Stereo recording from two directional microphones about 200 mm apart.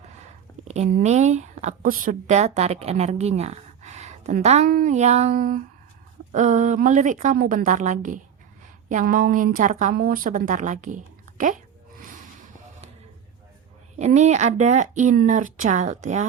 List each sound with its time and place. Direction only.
0.6 s a woman's voice: 35° right (ahead or behind)
14.0 s a woman's voice: 35° right (ahead or behind)